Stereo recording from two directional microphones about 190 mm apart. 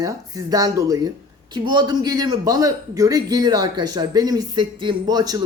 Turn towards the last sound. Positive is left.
turn(degrees=-20)  # may be behind; listen again after turning